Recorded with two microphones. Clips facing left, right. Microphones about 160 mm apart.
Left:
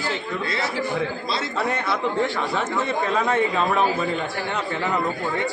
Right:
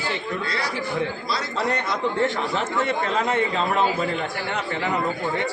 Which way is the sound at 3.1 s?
20° right (ahead or behind).